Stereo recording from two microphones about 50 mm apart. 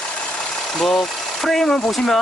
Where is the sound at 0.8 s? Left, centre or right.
Centre.